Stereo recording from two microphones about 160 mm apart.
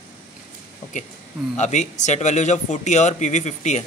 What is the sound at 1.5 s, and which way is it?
Speech, 45° left (ahead or behind).